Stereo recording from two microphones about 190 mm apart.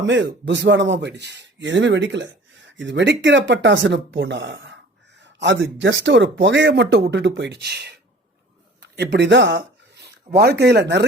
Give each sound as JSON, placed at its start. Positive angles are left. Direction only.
{"t": 0.0, "sound": "speech", "side_deg": -70}